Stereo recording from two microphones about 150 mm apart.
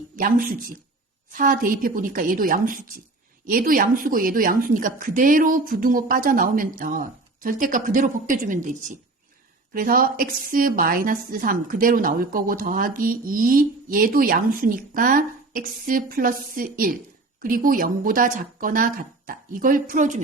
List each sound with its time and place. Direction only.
0.2 s a woman's voice: 70° right (ahead or behind)
9.7 s a woman's voice: 75° right (ahead or behind); by 20.2 s 55° right (ahead or behind)